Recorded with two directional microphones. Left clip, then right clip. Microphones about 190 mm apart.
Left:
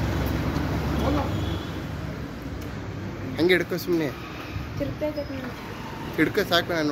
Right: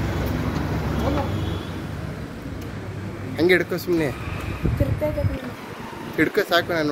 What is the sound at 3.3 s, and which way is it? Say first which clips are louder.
Speech: right 3 dB; centre (ahead or behind).